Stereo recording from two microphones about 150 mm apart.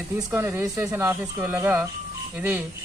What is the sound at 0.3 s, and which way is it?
Speech, 15° right (ahead or behind).